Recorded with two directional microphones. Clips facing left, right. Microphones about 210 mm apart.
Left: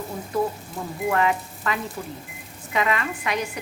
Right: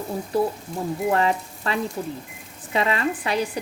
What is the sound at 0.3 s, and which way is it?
Speech, 30° right (ahead or behind).